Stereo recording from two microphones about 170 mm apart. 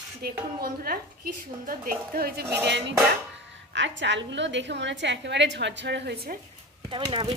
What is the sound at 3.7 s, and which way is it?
A woman's voice, 90° right.